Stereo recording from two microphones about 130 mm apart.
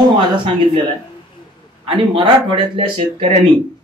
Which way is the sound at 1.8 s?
45° right (ahead or behind).